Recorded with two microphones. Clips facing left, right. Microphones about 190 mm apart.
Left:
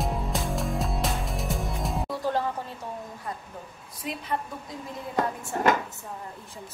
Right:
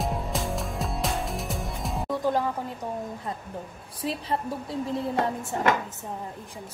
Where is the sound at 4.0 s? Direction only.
30° right (ahead or behind).